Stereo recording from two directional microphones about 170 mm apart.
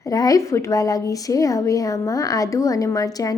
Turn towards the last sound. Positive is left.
turn(degrees=20)  # may be behind; listen again after turning